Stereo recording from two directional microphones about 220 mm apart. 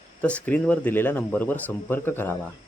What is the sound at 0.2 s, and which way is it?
Speech, 5° left (ahead or behind).